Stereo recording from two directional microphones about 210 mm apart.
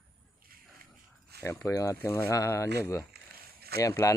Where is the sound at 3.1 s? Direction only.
50° right (ahead or behind).